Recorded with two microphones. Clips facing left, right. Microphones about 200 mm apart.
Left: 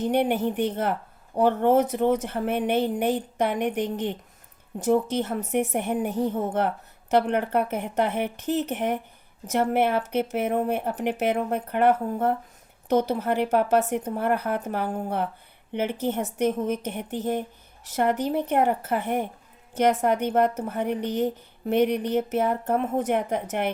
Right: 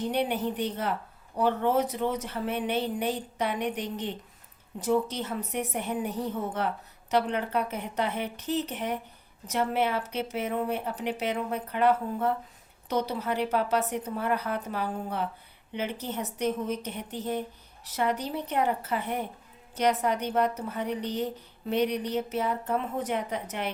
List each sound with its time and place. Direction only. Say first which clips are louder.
0.1 s a woman's voice: left 7 dB; 50° left (ahead or behind)